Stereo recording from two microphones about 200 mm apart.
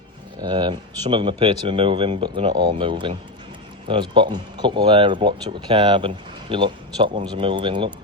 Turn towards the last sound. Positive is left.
turn(degrees=-25)  # may be behind; listen again after turning